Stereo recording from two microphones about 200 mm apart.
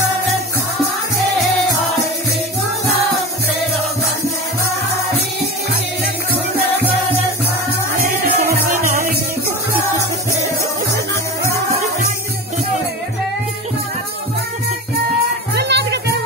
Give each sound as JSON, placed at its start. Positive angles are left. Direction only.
{"t": 8.5, "sound": "music", "side_deg": -45}
{"t": 15.5, "sound": "music", "side_deg": -55}